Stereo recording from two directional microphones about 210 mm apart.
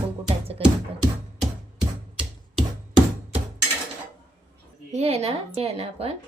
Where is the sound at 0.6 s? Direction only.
30° right (ahead or behind).